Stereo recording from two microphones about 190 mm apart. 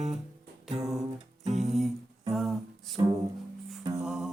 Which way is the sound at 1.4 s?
35° right (ahead or behind).